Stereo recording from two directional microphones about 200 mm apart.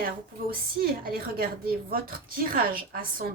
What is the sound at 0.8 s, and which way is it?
A woman's voice, 50° right (ahead or behind).